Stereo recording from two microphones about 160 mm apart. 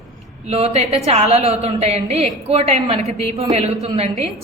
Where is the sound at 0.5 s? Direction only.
40° right (ahead or behind).